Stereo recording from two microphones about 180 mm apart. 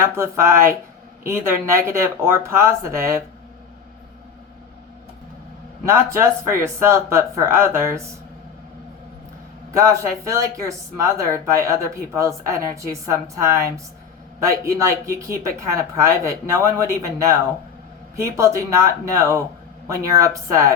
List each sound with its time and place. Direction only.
0.0 s speech: 15° right (ahead or behind)
5.8 s speech: 15° right (ahead or behind)
9.7 s speech: 15° right (ahead or behind)
18.3 s speech: 15° right (ahead or behind)